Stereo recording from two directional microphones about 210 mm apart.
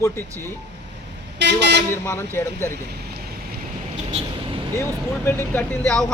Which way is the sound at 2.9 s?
50° right (ahead or behind).